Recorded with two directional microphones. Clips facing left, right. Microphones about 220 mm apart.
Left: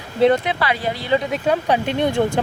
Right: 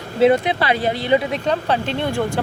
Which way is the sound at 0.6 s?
25° right (ahead or behind).